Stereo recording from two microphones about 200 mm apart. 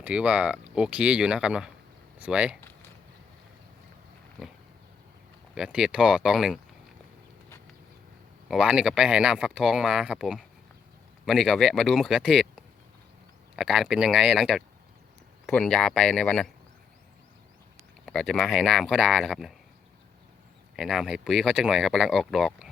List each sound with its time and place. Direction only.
0.0 s speech: 5° right (ahead or behind)
2.6 s a sound: 10° left (ahead or behind)
4.4 s pig: centre (ahead or behind)
5.5 s speech: 5° right (ahead or behind)
8.4 s speech: 5° right (ahead or behind)
13.6 s speech: centre (ahead or behind)
18.0 s speech: 5° left (ahead or behind)
20.7 s speech: centre (ahead or behind)